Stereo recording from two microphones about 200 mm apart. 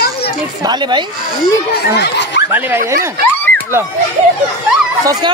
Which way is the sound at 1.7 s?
55° left (ahead or behind).